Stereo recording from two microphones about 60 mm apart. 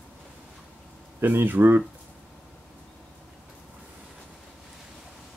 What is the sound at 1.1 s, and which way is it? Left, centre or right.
Speech, right.